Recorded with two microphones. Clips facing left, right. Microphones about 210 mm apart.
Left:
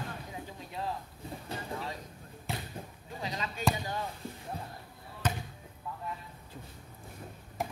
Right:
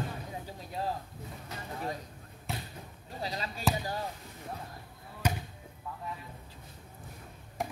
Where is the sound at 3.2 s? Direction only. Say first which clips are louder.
Even; 35° right (ahead or behind).